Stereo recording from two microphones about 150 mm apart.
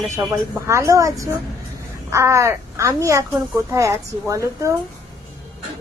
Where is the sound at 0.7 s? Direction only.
20° right (ahead or behind).